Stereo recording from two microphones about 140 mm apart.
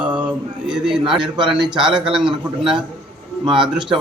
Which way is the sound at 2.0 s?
5° right (ahead or behind).